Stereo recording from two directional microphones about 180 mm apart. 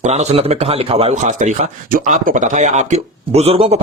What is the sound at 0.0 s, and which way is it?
Speech, 40° right (ahead or behind).